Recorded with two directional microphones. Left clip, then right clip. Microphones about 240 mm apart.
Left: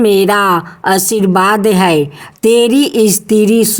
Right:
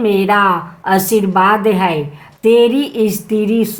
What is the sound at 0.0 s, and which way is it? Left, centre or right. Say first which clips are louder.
A woman's voice: left 2 dB; left.